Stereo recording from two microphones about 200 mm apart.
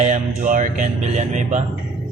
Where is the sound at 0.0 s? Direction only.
40° right (ahead or behind).